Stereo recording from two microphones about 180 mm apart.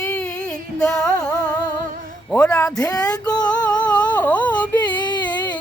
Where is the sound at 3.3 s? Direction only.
20° left (ahead or behind).